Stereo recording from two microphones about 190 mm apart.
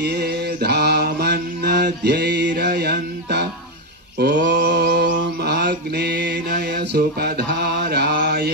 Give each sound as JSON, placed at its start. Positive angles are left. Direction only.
{"t": 0.0, "sound": "mantra", "side_deg": -60}